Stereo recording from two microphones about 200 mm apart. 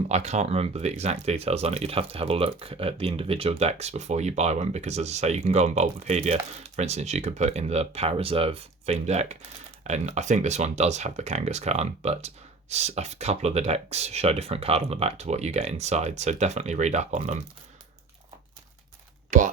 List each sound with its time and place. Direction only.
0.1 s speech: 35° right (ahead or behind)